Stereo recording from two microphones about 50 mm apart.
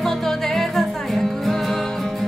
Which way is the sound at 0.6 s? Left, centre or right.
Centre.